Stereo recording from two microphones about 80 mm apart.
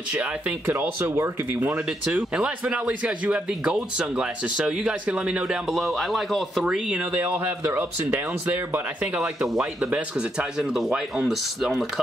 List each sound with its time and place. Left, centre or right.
0.1 s speech: centre
0.7 s speech: right
1.9 s speech: centre
5.7 s speech: centre
6.6 s speech: centre